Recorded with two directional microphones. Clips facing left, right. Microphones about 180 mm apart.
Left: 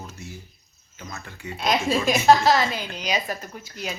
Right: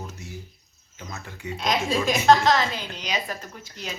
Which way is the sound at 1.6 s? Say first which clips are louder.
Left 2 dB; 5° left (ahead or behind).